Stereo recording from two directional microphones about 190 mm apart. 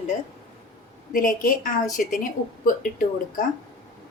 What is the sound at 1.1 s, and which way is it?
A woman's voice, 45° left (ahead or behind).